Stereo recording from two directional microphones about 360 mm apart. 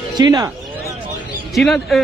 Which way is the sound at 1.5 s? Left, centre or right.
Centre.